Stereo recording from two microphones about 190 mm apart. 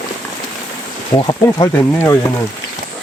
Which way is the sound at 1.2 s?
20° left (ahead or behind).